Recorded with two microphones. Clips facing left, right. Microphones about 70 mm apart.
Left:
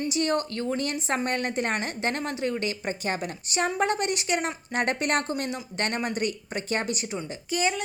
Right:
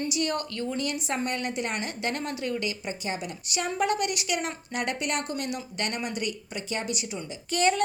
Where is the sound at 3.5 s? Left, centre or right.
Left.